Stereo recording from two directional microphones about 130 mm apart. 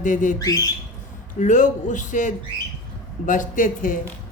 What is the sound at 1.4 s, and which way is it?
Speech, 75° left (ahead or behind).